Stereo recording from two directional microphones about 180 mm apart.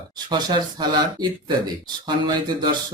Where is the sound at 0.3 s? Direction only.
25° right (ahead or behind).